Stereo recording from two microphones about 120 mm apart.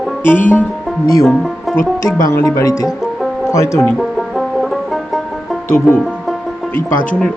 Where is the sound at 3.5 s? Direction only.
25° left (ahead or behind).